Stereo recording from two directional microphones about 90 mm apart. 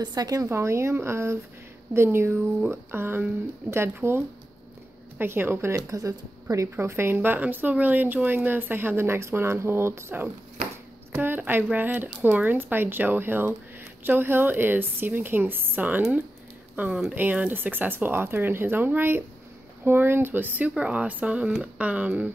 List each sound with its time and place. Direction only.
0.0 s a woman's voice: 45° right (ahead or behind)
0.5 s speech: 30° right (ahead or behind)
5.2 s speech: 25° right (ahead or behind)